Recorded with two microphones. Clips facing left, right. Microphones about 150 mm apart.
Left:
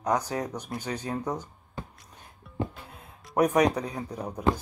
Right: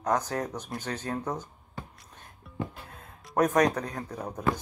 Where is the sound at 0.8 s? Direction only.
10° left (ahead or behind).